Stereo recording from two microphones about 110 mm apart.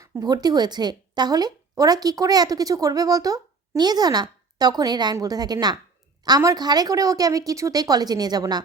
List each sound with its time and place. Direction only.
0.0 s a woman's voice: 35° right (ahead or behind)